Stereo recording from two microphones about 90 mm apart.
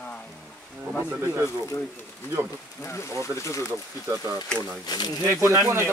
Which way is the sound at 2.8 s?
30° left (ahead or behind).